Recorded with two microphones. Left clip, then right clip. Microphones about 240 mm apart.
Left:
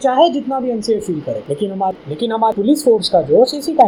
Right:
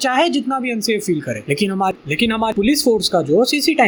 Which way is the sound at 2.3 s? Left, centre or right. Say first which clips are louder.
Left 8 dB; right.